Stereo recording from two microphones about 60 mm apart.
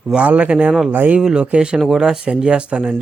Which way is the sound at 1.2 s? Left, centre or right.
Centre.